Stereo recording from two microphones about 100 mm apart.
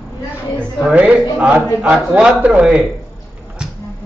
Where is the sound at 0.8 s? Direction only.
15° right (ahead or behind).